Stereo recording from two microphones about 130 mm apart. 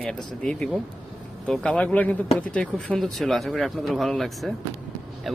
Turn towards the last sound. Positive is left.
turn(degrees=0)  # may be behind; listen again after turning